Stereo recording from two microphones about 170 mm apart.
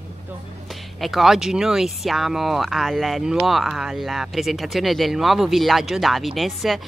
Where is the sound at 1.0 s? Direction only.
Centre (ahead or behind).